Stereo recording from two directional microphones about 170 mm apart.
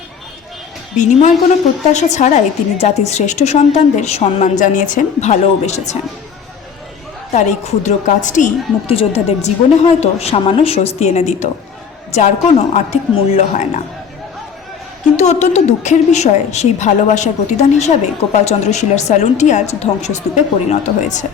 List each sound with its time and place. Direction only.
0.9 s a woman's voice: 45° left (ahead or behind)
7.3 s a woman's voice: 40° left (ahead or behind)
8.9 s a woman's voice: 35° left (ahead or behind)
15.1 s a woman's voice: 40° left (ahead or behind)